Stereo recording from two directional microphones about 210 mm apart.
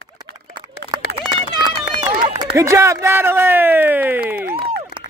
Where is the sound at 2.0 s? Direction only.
20° right (ahead or behind).